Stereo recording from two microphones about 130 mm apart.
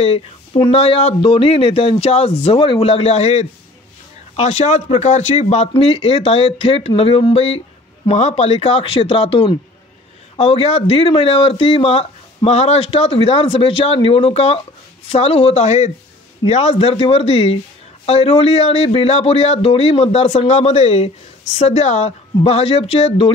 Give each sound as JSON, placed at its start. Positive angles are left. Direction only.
{"t": 0.0, "sound": "a man's voice", "side_deg": 45}